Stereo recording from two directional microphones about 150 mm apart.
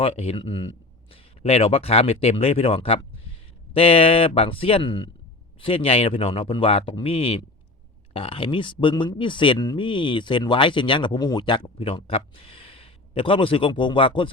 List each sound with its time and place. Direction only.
0.0 s speech: 40° left (ahead or behind)
1.1 s speech: 45° left (ahead or behind)